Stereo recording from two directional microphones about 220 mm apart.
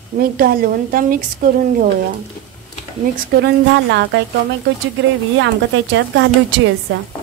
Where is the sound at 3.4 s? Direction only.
50° right (ahead or behind).